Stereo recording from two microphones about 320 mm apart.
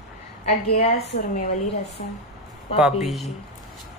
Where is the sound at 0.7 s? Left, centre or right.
Left.